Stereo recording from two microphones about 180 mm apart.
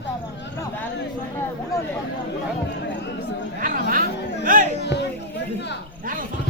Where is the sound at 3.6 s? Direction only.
50° right (ahead or behind).